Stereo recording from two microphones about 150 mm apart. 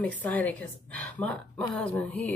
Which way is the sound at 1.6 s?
10° left (ahead or behind).